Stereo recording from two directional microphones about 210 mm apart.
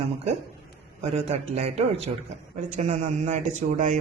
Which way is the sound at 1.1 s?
30° right (ahead or behind).